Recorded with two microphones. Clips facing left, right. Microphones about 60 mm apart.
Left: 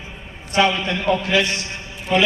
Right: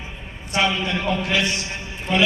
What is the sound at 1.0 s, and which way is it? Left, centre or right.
Speech, left.